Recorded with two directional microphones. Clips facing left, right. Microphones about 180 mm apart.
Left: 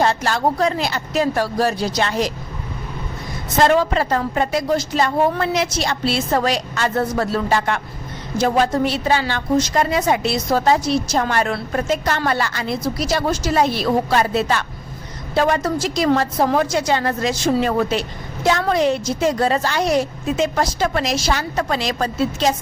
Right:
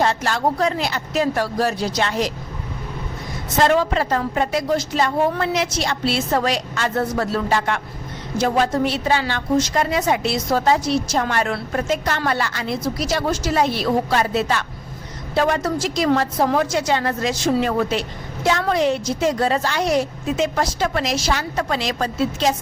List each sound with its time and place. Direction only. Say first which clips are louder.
0.0 s a woman's voice: left 1 dB; 35° left (ahead or behind)
3.6 s a woman's voice: left 2 dB; 40° left (ahead or behind)